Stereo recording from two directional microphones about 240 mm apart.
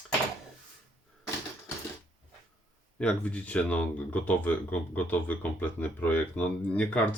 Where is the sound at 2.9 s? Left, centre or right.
Centre.